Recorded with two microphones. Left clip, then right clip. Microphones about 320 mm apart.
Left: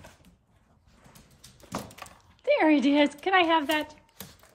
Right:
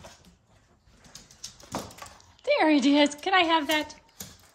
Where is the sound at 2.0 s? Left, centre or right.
Centre.